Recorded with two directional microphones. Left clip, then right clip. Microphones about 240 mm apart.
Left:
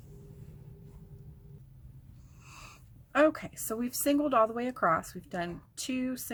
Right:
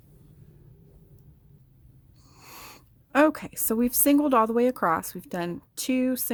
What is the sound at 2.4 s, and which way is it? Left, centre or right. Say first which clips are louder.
Speech: right 6 dB; right.